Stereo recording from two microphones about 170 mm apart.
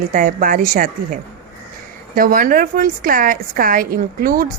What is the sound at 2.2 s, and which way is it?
A woman's voice, 55° right (ahead or behind).